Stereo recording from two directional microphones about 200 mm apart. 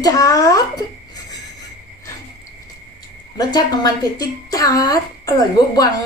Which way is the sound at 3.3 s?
20° left (ahead or behind).